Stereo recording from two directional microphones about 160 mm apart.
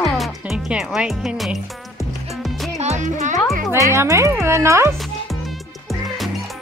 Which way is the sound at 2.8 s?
45° right (ahead or behind).